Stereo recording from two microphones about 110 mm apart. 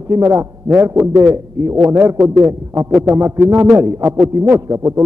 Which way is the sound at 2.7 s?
5° right (ahead or behind).